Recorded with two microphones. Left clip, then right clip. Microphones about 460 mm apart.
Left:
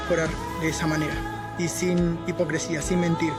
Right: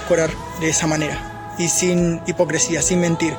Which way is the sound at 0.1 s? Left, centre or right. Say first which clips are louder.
Right 8 dB; left.